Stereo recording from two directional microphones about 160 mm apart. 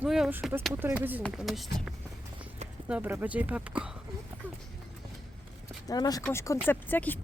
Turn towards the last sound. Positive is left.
turn(degrees=10)  # may be behind; listen again after turning